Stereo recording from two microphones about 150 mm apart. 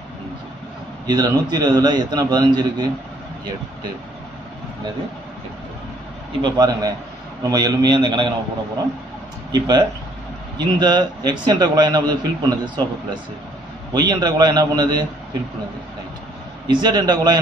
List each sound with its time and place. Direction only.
1.0 s a man's voice: 25° right (ahead or behind)
6.4 s a man's voice: 25° right (ahead or behind)
9.5 s a man's voice: 25° right (ahead or behind)
16.6 s a man's voice: 30° right (ahead or behind)